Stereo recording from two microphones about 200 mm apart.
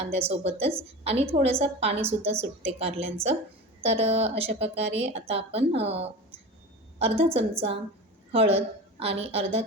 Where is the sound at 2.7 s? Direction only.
30° right (ahead or behind).